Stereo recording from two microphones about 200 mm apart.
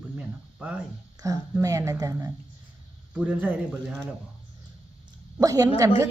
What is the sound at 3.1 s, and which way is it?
Speech, 5° right (ahead or behind).